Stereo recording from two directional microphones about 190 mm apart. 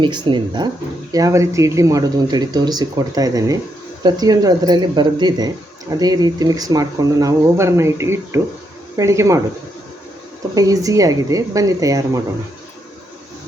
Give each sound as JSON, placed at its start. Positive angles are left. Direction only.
{"t": 0.0, "sound": "speech", "side_deg": -25}
{"t": 10.5, "sound": "speech", "side_deg": -20}